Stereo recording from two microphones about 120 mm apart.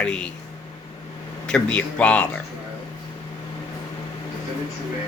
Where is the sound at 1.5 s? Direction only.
10° left (ahead or behind).